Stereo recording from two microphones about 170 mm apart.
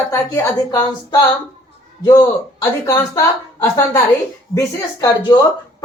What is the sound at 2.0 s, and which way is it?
Speech, 20° left (ahead or behind).